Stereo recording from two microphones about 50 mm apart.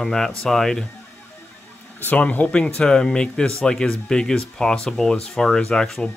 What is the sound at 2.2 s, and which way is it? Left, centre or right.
Speech, left.